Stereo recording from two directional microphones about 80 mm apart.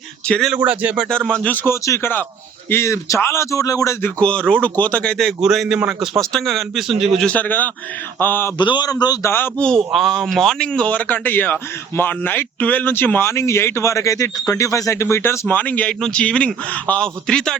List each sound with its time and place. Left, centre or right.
0.5 s speech: centre
1.0 s speech: centre
1.5 s a man's voice: left
2.0 s a man's voice: left
4.0 s speech: centre
5.4 s a man's voice: centre
6.1 s speech: centre
7.3 s speech: left
8.5 s a man's voice: left
8.9 s a man's voice: left
9.2 s speech: left
9.6 s speech: centre; by 15.4 s left
15.4 s speech: centre